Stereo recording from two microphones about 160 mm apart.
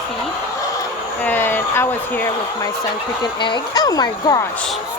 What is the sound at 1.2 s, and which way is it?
Speech, 15° left (ahead or behind).